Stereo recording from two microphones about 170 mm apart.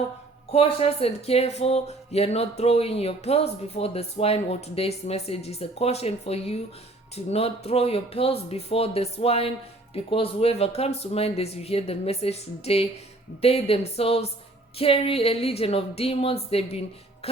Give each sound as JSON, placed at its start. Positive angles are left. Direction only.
{"t": 0.5, "sound": "speech", "side_deg": 35}